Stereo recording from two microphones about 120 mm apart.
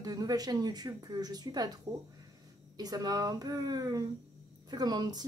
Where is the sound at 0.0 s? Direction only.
30° right (ahead or behind).